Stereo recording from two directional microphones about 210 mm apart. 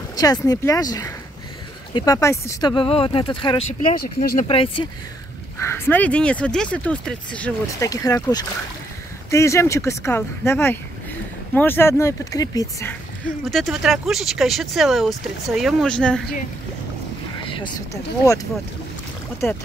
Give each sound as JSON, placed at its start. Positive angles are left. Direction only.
{"t": 0.1, "sound": "speech", "side_deg": 15}
{"t": 5.6, "sound": "speech", "side_deg": 10}
{"t": 13.5, "sound": "speech", "side_deg": 0}
{"t": 17.5, "sound": "speech", "side_deg": 20}